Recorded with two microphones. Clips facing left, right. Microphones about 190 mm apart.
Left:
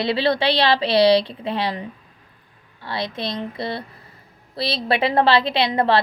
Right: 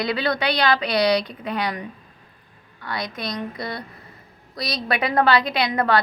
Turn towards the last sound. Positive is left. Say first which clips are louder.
# left 2 dB
turn(degrees=30)  # may be behind; listen again after turning